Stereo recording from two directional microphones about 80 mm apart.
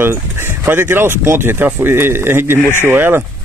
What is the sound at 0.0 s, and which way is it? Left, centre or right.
Speech, right.